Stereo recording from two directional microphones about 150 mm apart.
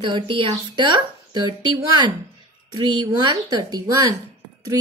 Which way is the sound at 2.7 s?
30° right (ahead or behind).